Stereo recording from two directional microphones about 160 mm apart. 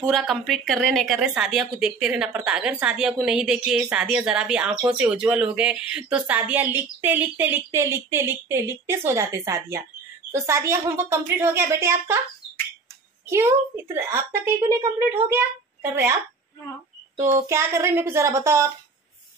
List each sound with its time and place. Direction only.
0.0 s a woman's voice: centre (ahead or behind); by 12.2 s 15° right (ahead or behind)
13.3 s a woman's voice: 15° right (ahead or behind)
17.2 s a woman's voice: 15° right (ahead or behind)